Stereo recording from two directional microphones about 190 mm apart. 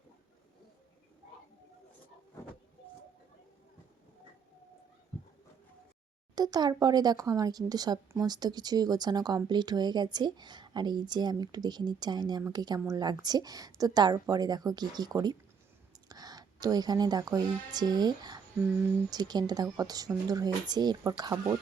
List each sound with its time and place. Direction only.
6.3 s speech: 20° right (ahead or behind)